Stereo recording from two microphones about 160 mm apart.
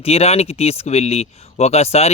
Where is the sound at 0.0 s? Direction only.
40° left (ahead or behind).